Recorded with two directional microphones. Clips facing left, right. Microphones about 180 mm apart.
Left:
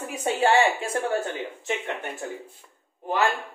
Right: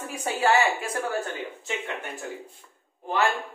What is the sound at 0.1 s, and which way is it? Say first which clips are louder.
Speech: left 2 dB; 25° left (ahead or behind).